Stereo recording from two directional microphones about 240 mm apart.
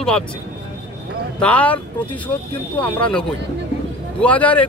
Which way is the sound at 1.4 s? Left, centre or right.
Centre.